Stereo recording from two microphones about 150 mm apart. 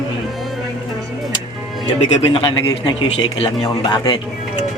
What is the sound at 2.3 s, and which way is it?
Speech, 30° left (ahead or behind).